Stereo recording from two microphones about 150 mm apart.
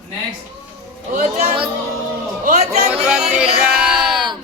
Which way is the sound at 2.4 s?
50° right (ahead or behind).